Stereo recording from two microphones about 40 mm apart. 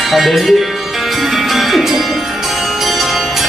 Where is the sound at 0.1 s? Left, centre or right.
Centre.